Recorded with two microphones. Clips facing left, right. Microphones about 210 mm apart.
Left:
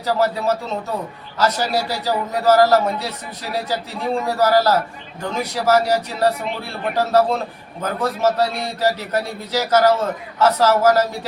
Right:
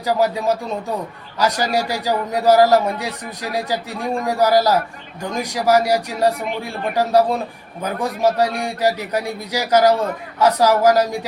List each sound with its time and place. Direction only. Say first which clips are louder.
0.0 s speech: right 1 dB; 15° right (ahead or behind)